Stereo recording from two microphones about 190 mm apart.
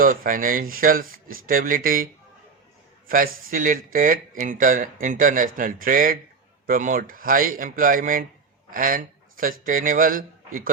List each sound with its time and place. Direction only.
0.0 s speech: 45° right (ahead or behind)
3.1 s speech: 45° right (ahead or behind)